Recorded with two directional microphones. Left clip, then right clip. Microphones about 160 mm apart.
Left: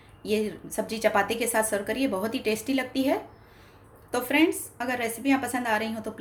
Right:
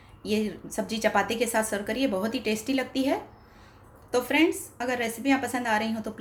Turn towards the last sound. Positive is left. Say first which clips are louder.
# even
turn(degrees=0)  # may be behind; listen again after turning